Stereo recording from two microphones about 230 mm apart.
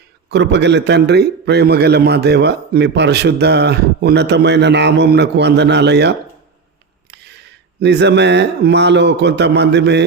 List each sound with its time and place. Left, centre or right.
0.3 s a man's voice: right